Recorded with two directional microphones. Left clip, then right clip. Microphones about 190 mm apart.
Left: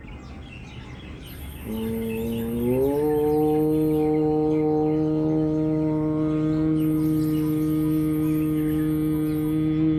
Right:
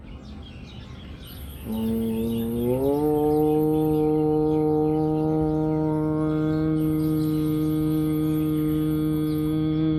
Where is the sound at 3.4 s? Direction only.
45° right (ahead or behind).